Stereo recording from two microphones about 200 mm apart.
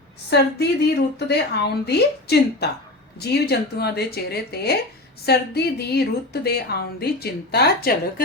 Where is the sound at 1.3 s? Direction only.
55° left (ahead or behind).